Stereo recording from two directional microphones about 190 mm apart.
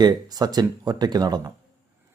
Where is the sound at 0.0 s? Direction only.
20° right (ahead or behind).